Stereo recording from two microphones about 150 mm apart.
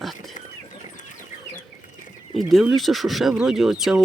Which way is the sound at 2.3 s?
Centre (ahead or behind).